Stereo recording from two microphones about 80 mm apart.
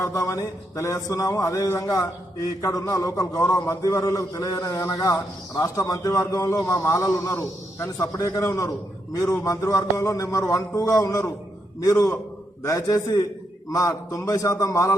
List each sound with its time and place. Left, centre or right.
0.0 s a man's voice: left